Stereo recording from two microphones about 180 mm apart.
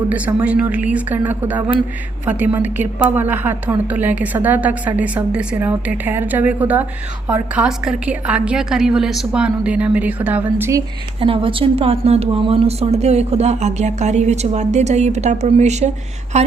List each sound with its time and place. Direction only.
0.1 s a woman's voice: 10° right (ahead or behind)
11.2 s a woman's voice: 30° right (ahead or behind)